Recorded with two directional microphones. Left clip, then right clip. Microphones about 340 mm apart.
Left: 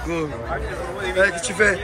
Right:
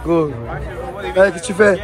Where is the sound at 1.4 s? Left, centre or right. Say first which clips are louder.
Right 5 dB; centre.